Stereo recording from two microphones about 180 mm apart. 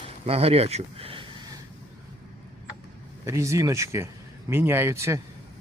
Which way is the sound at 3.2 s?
15° right (ahead or behind).